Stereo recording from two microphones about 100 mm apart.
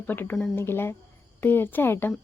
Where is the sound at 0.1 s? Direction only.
20° left (ahead or behind).